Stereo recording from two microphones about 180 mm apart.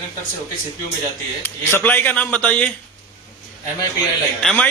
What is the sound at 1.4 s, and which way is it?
Speech, 10° left (ahead or behind).